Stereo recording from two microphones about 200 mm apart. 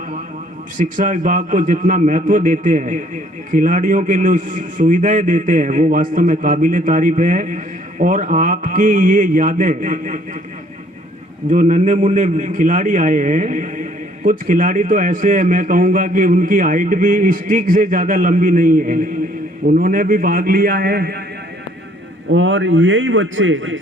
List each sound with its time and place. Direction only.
0.8 s a man's voice: 40° right (ahead or behind)
11.5 s a man's voice: 40° right (ahead or behind)
22.3 s a man's voice: 65° right (ahead or behind)